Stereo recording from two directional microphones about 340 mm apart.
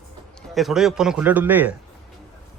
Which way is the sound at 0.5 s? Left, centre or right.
Centre.